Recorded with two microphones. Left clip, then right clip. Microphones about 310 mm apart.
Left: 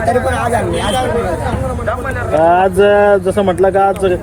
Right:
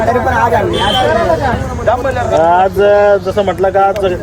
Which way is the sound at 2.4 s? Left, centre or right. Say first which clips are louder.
Even; left.